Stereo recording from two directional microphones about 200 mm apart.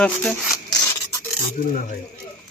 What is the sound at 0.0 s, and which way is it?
Rub, 5° left (ahead or behind).